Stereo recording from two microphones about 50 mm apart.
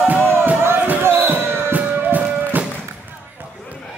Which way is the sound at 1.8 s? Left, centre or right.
Right.